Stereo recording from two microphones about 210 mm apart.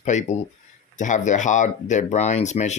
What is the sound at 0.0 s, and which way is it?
Speech, 35° left (ahead or behind).